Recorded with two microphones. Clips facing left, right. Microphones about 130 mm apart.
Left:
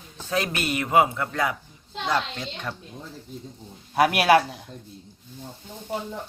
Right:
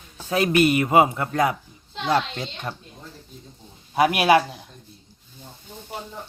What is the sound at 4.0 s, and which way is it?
Speech, centre (ahead or behind).